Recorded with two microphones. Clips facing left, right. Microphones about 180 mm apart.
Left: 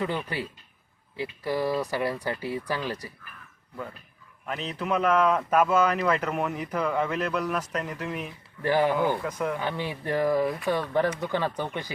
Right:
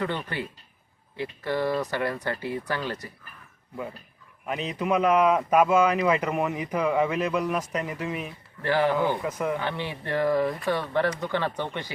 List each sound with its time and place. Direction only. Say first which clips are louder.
0.0 s speech: even; 10° left (ahead or behind)
4.4 s speech: right 3 dB; 10° right (ahead or behind)
8.6 s speech: even; 15° left (ahead or behind)
9.2 s speech: right 1 dB; 5° right (ahead or behind)
9.6 s speech: even; 15° left (ahead or behind)